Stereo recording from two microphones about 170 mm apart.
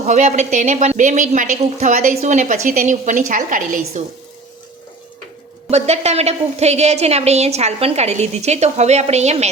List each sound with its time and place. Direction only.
0.0 s a woman's voice: 45° right (ahead or behind)
5.7 s a woman's voice: 40° right (ahead or behind)